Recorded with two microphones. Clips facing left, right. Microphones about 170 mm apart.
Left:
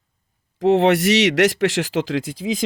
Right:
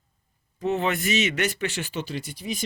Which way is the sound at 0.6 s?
90° left.